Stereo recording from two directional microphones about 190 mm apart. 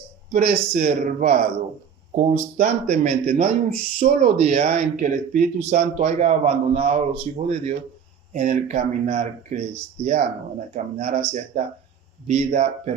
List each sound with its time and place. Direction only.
0.3 s speech: 45° right (ahead or behind)
8.3 s speech: 45° right (ahead or behind)